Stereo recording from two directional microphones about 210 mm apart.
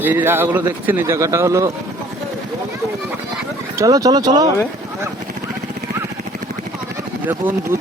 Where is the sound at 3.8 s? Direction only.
15° right (ahead or behind).